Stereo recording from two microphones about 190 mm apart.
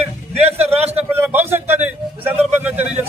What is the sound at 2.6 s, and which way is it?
Speech, 10° right (ahead or behind).